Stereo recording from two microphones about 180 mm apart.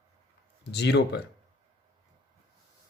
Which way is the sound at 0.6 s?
70° left (ahead or behind).